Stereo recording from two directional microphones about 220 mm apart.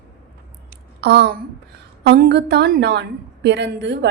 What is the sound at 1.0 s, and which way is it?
A woman's voice, 50° right (ahead or behind).